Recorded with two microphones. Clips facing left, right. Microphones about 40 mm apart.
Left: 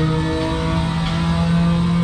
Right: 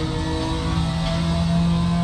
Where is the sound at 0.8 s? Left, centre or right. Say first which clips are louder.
Left 3 dB; left.